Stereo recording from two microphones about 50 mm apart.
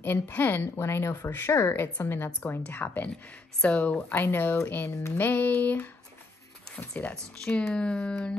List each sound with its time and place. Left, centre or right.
0.0 s a woman's voice: left
0.7 s a woman's voice: left
4.1 s a sound: left
4.9 s speech: left
5.2 s a sound: left
7.7 s speech: left